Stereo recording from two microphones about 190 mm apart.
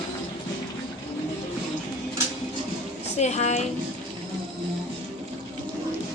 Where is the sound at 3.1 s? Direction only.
35° left (ahead or behind).